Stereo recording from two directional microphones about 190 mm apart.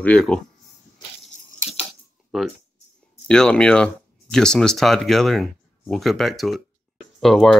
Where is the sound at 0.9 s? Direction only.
30° left (ahead or behind).